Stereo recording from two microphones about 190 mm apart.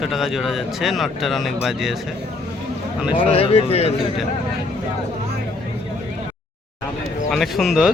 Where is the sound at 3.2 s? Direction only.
30° left (ahead or behind).